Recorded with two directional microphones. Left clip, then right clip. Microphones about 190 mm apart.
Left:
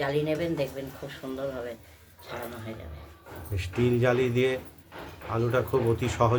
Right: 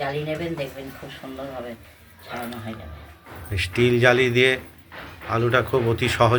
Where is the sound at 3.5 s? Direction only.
5° right (ahead or behind).